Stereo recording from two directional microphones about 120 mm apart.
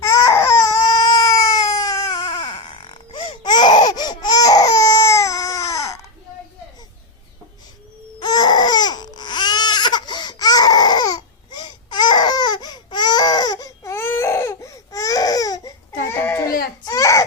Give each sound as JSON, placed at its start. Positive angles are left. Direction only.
{"t": 0.0, "sound": "baby cry", "side_deg": 25}
{"t": 2.6, "sound": "baby cry", "side_deg": 50}
{"t": 8.2, "sound": "baby cry", "side_deg": 35}
{"t": 16.2, "sound": "baby cry", "side_deg": 20}
{"t": 16.8, "sound": "baby cry", "side_deg": 30}